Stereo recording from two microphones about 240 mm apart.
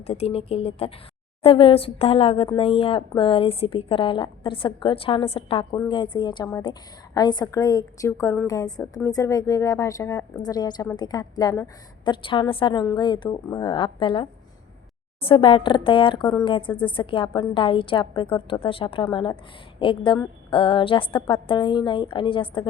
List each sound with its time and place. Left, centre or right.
0.0 s a woman's voice: left